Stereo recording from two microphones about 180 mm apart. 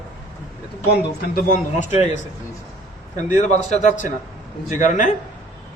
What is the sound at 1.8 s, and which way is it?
Speech, 40° left (ahead or behind).